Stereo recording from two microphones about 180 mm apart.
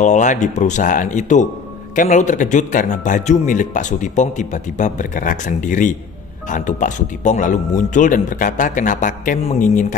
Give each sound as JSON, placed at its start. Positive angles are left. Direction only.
{"t": 0.0, "sound": "speech", "side_deg": 40}